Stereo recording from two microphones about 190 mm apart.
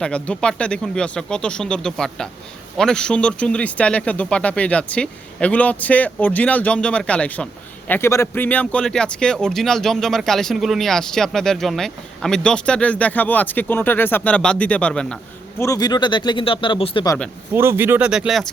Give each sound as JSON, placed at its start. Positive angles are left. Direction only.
{"t": 0.0, "sound": "speech", "side_deg": 5}
{"t": 17.5, "sound": "speech", "side_deg": -10}